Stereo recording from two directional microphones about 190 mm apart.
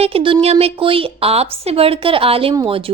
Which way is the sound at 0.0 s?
30° right (ahead or behind).